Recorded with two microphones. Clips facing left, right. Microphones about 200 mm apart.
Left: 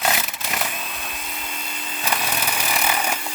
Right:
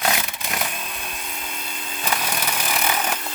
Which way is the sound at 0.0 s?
5° left (ahead or behind).